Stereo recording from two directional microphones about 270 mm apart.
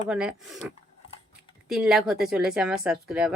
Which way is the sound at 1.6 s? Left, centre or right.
Centre.